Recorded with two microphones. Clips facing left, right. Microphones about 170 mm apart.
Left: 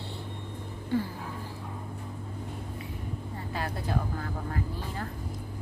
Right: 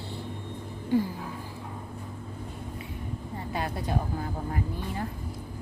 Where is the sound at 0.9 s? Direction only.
15° right (ahead or behind).